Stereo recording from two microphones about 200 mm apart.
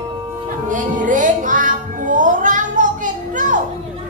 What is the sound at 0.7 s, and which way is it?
Music, 40° right (ahead or behind).